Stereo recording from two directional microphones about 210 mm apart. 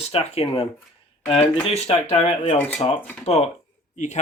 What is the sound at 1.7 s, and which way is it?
Speech, 30° left (ahead or behind).